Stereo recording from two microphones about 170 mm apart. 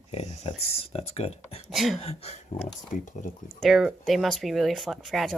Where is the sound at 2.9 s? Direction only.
50° left (ahead or behind).